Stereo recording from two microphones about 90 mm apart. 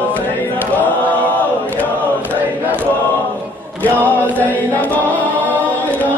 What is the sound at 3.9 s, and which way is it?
Chant, 20° left (ahead or behind).